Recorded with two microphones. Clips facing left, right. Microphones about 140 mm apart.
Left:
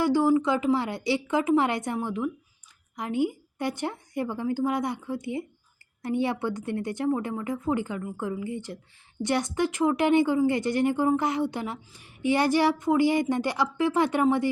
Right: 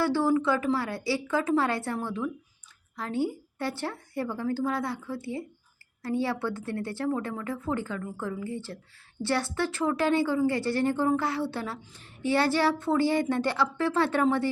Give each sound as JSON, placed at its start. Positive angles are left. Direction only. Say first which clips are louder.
{"t": 0.0, "sound": "a woman's voice", "louder": "left 3 dB", "side_deg": 15}